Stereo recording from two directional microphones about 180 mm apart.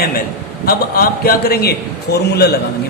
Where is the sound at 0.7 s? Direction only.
55° left (ahead or behind).